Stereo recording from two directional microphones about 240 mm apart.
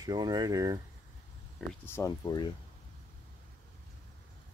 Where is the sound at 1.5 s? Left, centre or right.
Centre.